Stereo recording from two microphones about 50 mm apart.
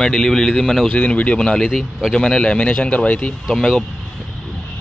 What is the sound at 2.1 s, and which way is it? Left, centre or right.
Speech, centre.